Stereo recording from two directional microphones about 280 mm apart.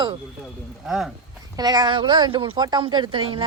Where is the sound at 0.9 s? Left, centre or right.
Centre.